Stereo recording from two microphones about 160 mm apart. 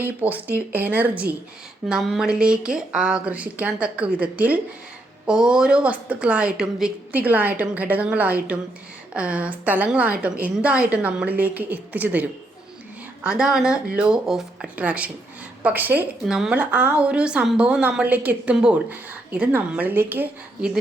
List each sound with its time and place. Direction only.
0.0 s a woman's voice: 10° right (ahead or behind)
13.2 s a woman's voice: 5° right (ahead or behind)